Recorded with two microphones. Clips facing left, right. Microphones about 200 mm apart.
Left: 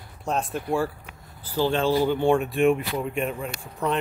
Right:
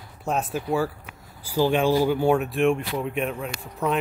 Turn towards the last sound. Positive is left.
turn(degrees=0)  # may be behind; listen again after turning